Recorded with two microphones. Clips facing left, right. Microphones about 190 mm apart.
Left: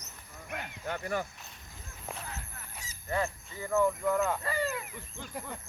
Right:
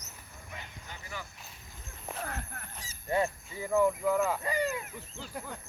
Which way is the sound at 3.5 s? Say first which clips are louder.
Even; 10° right (ahead or behind).